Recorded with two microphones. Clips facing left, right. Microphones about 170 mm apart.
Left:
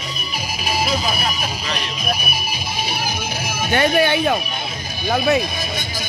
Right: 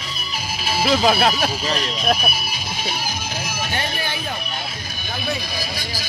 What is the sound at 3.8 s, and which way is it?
Speech, 70° left (ahead or behind).